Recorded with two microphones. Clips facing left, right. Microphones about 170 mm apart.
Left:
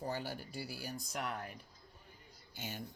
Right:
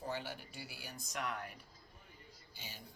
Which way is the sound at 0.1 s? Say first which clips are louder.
Left 2 dB; 40° left (ahead or behind).